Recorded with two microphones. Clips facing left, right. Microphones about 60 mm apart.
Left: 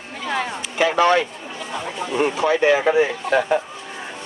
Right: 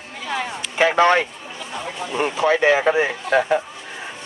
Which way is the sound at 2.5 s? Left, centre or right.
Right.